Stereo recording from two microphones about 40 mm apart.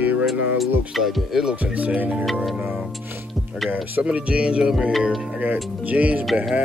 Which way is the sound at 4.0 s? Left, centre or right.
Right.